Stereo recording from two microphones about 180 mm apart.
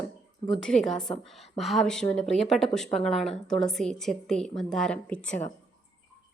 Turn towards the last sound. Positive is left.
turn(degrees=5)  # may be behind; listen again after turning